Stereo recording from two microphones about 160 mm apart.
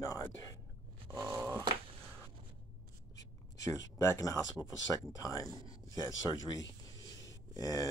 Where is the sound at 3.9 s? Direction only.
20° left (ahead or behind).